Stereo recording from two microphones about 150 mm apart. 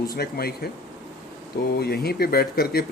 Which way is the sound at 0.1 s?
90° left.